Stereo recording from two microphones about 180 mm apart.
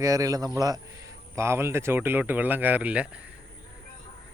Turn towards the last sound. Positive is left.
turn(degrees=-5)  # may be behind; listen again after turning